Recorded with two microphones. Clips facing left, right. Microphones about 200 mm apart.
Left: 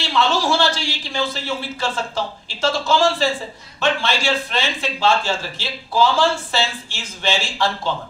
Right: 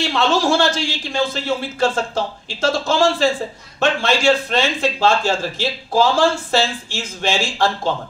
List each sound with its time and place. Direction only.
0.0 s a man's voice: 50° right (ahead or behind)